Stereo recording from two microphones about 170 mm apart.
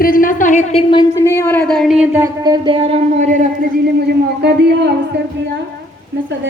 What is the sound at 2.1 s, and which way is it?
Speech, 20° right (ahead or behind).